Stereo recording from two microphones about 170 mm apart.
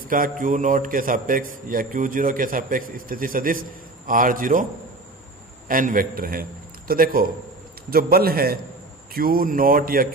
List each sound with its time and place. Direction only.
0.1 s a man's voice: 55° right (ahead or behind)
5.7 s speech: 55° right (ahead or behind)